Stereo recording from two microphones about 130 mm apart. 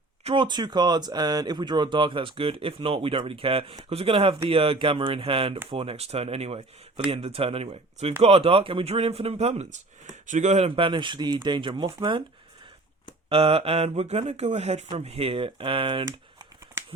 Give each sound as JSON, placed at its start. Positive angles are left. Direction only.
{"t": 0.3, "sound": "speech", "side_deg": -35}
{"t": 10.1, "sound": "speech", "side_deg": -70}
{"t": 10.7, "sound": "speech", "side_deg": -45}
{"t": 13.3, "sound": "speech", "side_deg": -45}